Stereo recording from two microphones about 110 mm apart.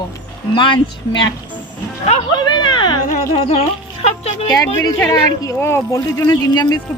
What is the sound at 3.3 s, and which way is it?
Speech, 65° left (ahead or behind).